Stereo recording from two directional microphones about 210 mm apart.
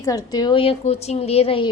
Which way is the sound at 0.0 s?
15° left (ahead or behind).